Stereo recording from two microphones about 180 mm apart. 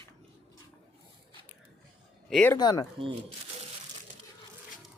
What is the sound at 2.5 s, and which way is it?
Speech, 25° left (ahead or behind).